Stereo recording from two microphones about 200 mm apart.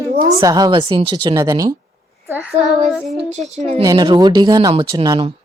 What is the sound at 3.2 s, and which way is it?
A woman's voice, 35° right (ahead or behind).